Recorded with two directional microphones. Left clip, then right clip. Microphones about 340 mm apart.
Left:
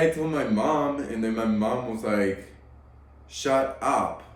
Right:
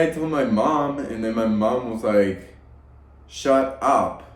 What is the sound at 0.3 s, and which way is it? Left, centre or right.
A man's voice, centre.